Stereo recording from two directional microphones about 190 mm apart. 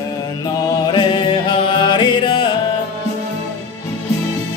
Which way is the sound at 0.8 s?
25° left (ahead or behind).